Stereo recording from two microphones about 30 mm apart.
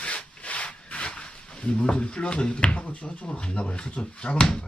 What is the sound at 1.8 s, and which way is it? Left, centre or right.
Speech, left.